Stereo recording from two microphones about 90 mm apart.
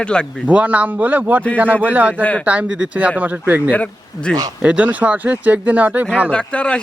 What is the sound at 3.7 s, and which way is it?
Speech, 15° left (ahead or behind).